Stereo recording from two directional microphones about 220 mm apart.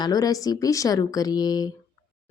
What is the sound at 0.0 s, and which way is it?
Speech, 15° left (ahead or behind).